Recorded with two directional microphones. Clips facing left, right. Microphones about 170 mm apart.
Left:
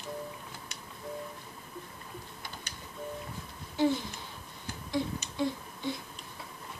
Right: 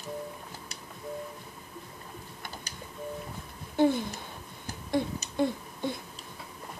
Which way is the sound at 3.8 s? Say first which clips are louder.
Right 4 dB; 55° right (ahead or behind).